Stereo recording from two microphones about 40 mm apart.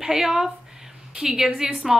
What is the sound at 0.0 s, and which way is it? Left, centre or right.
A woman's voice, centre.